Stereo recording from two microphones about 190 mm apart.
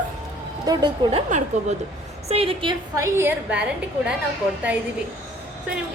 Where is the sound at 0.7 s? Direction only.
20° right (ahead or behind).